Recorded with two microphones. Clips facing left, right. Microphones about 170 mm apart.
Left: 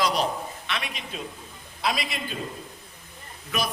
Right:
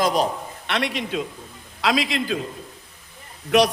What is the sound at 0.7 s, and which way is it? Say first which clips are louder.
A man's voice: right 12 dB; 75° right (ahead or behind).